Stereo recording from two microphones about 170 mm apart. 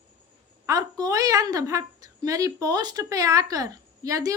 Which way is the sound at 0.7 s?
20° right (ahead or behind).